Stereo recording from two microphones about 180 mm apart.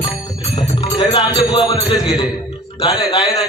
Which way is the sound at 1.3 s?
20° left (ahead or behind).